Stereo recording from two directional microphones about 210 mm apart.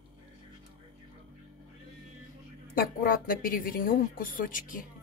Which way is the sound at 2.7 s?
45° left (ahead or behind).